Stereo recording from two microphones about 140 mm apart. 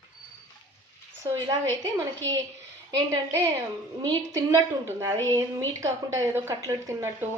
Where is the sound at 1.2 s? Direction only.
30° right (ahead or behind).